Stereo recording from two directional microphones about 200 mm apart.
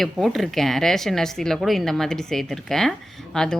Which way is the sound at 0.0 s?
Centre (ahead or behind).